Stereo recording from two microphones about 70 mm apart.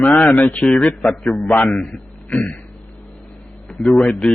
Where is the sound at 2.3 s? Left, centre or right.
Left.